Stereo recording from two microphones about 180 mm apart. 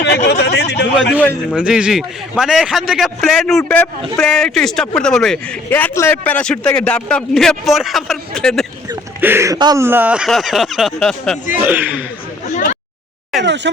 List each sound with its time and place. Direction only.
0.3 s speech: 70° left (ahead or behind)
1.1 s a man's voice: 10° left (ahead or behind)
1.5 s a man's voice: 5° right (ahead or behind)
9.2 s speech: 15° right (ahead or behind); by 11.3 s centre (ahead or behind)
11.6 s speech: 10° right (ahead or behind)
13.3 s speech: centre (ahead or behind)